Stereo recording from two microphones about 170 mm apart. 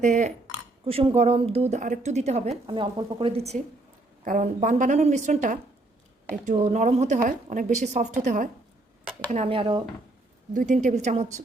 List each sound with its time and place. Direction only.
0.0 s a woman's voice: 45° right (ahead or behind)
0.9 s speech: 35° right (ahead or behind)
4.2 s a woman's voice: 50° right (ahead or behind)
9.3 s speech: 35° right (ahead or behind)
10.5 s a woman's voice: 50° right (ahead or behind)